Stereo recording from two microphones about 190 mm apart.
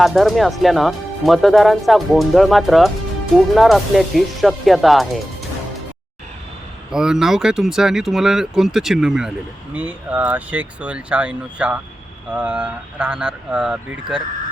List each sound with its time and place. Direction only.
0.0 s speech: centre (ahead or behind)
6.9 s speech: 5° right (ahead or behind)